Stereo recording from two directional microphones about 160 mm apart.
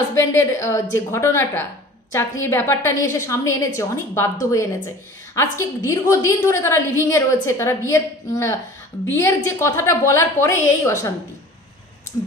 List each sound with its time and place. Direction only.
0.1 s a woman's voice: 15° left (ahead or behind)